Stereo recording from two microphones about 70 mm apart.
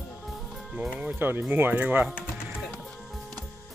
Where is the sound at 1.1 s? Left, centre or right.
Right.